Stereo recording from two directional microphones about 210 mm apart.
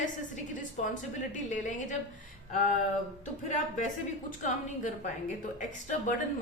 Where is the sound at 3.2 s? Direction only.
35° left (ahead or behind).